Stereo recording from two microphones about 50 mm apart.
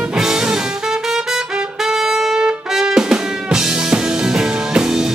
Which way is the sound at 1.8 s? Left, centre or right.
Centre.